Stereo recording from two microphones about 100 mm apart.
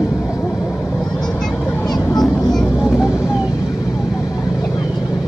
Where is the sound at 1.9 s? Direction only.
40° left (ahead or behind).